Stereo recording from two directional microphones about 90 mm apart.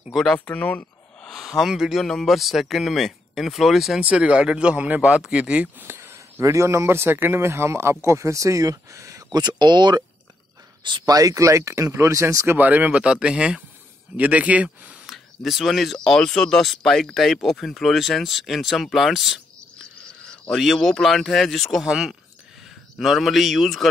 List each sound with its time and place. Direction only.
0.1 s speech: 5° left (ahead or behind)
0.5 s a sound: 15° left (ahead or behind)
1.3 s speech: centre (ahead or behind)
4.0 s a man's voice: 15° right (ahead or behind); by 9.4 s 35° right (ahead or behind)
9.4 s speech: 55° right (ahead or behind)
11.1 s speech: 40° right (ahead or behind)
12.5 s speech: 20° right (ahead or behind)
15.0 s speech: centre (ahead or behind)
20.5 s speech: centre (ahead or behind)